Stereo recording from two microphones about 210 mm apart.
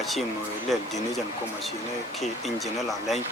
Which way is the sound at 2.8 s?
Centre (ahead or behind).